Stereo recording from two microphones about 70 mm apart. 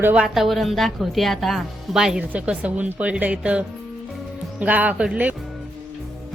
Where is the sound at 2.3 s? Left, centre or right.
Centre.